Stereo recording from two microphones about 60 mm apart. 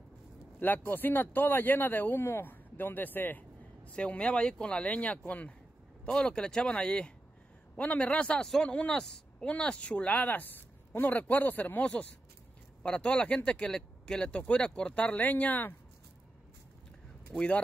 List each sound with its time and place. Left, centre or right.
0.6 s speech: left
3.9 s speech: centre
6.0 s speech: centre
7.7 s speech: left
9.0 s a woman's voice: centre
9.5 s speech: centre